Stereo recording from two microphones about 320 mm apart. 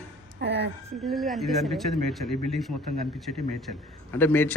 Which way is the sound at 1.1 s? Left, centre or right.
Centre.